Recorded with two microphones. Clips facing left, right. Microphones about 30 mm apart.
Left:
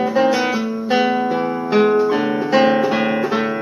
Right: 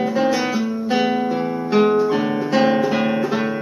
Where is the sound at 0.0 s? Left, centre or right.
Centre.